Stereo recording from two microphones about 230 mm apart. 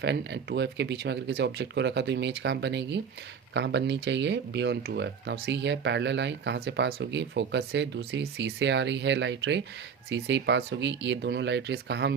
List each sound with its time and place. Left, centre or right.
0.0 s speech: right